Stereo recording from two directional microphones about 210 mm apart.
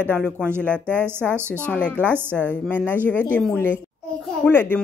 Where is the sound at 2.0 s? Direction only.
10° right (ahead or behind).